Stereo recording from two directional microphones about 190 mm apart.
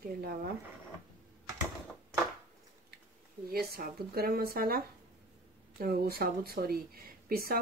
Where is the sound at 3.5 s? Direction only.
50° right (ahead or behind).